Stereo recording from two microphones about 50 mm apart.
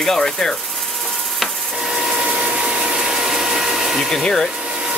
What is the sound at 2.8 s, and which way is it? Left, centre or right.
Ratchet, centre.